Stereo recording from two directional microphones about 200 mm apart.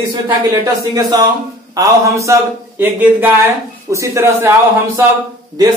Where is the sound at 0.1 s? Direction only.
20° right (ahead or behind).